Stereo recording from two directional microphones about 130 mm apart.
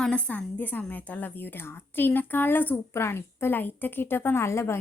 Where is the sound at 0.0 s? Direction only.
10° left (ahead or behind).